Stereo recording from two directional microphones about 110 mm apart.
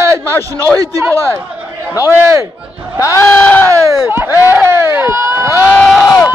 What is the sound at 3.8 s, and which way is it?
A man's voice, 20° right (ahead or behind).